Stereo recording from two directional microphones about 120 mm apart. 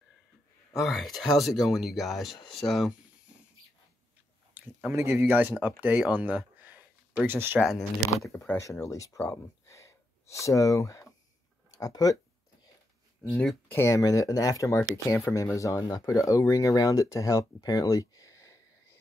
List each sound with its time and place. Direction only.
0.7 s speech: centre (ahead or behind)
4.6 s speech: 20° right (ahead or behind)
8.5 s speech: 20° left (ahead or behind)
13.3 s speech: centre (ahead or behind)
13.7 s speech: 25° left (ahead or behind)